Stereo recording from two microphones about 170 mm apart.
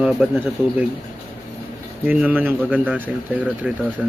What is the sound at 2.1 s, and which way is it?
Speech, 10° right (ahead or behind).